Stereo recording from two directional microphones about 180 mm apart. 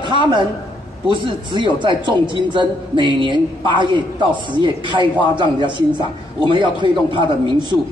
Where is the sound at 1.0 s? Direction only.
25° right (ahead or behind).